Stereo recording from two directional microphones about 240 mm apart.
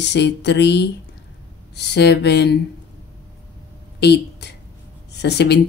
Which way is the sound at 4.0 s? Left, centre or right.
Left.